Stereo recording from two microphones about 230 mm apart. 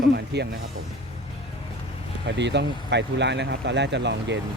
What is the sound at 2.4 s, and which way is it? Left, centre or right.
Speech, right.